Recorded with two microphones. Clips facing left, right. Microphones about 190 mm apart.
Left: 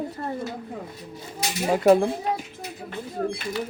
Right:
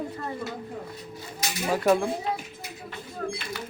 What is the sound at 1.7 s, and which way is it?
Speech, 25° left (ahead or behind).